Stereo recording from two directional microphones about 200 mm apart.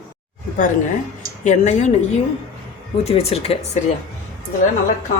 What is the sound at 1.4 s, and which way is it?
Speech, 35° left (ahead or behind).